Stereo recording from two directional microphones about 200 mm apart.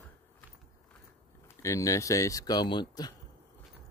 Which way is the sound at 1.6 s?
15° left (ahead or behind).